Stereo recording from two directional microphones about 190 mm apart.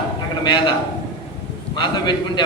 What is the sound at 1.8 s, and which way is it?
Speech, 25° left (ahead or behind).